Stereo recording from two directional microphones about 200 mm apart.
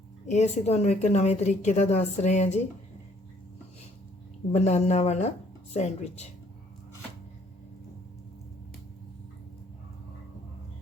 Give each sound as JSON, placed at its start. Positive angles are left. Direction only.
{"t": 0.3, "sound": "a woman's voice", "side_deg": 35}
{"t": 4.5, "sound": "a woman's voice", "side_deg": 35}